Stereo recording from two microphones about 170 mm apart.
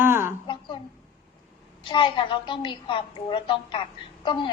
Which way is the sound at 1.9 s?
30° left (ahead or behind).